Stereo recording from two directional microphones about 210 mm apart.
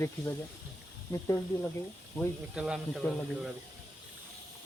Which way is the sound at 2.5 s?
5° right (ahead or behind).